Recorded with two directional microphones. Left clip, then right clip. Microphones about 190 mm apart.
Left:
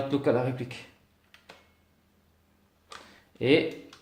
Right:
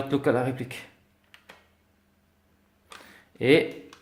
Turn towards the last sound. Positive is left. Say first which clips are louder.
# right 3 dB
turn(degrees=-35)  # may be behind; listen again after turning